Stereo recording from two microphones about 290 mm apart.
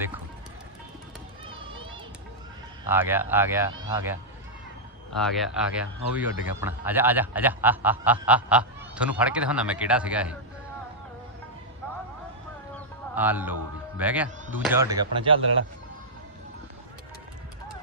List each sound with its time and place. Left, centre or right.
2.9 s a man's voice: centre
13.1 s a man's voice: centre
15.4 s speech: right